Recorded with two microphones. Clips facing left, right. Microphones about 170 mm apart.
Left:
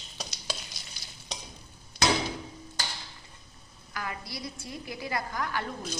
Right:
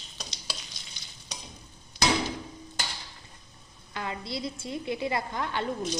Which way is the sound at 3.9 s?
25° right (ahead or behind).